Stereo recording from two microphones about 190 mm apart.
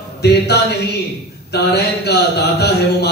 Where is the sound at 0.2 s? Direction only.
60° left (ahead or behind).